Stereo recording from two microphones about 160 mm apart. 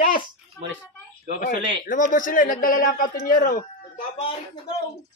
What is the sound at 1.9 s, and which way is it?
A man's voice, 55° left (ahead or behind).